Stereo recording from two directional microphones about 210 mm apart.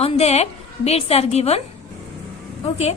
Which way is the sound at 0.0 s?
30° left (ahead or behind).